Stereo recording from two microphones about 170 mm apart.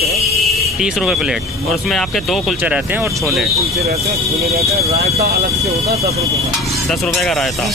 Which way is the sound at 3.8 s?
40° right (ahead or behind).